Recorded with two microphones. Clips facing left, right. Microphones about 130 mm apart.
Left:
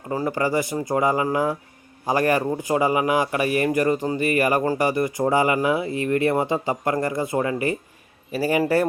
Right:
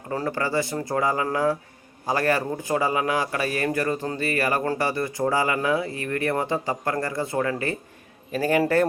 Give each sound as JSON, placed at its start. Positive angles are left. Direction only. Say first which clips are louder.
{"t": 0.1, "sound": "a man's voice", "louder": "left 3 dB", "side_deg": 5}